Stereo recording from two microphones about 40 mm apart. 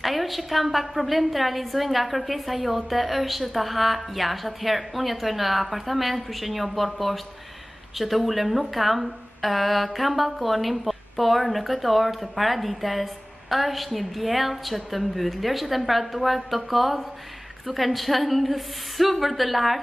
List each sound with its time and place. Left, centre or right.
0.0 s a woman's voice: centre